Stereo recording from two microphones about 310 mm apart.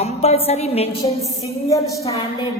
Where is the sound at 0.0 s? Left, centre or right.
Centre.